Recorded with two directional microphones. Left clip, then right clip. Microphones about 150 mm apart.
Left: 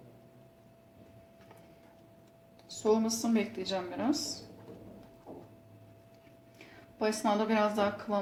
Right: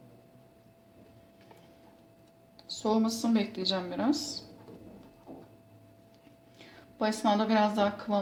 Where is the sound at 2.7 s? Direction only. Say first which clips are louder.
Left 1 dB; 35° right (ahead or behind).